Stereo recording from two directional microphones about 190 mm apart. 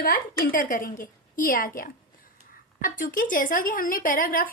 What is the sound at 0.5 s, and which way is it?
A woman's voice, 45° left (ahead or behind).